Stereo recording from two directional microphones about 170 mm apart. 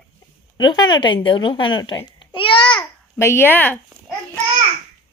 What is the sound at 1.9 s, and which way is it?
Babbling, 25° left (ahead or behind).